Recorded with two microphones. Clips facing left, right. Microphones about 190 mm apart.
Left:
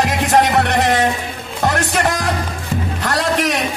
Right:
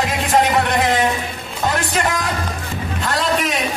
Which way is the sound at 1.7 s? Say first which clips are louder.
Left 2 dB; 70° left (ahead or behind).